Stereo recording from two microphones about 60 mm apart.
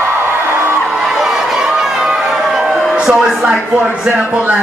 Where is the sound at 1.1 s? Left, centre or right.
Centre.